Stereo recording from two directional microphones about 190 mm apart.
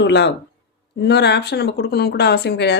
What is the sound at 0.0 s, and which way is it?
Speech, 65° left (ahead or behind).